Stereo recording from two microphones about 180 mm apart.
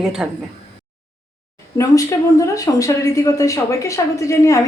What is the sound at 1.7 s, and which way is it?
A woman's voice, 15° left (ahead or behind).